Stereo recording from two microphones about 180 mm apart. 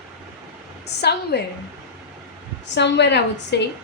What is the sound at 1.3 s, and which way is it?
Speech, 65° left (ahead or behind).